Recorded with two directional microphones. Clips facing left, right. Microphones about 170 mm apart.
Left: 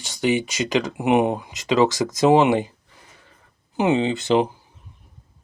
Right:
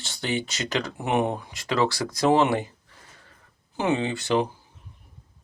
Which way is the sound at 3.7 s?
20° left (ahead or behind).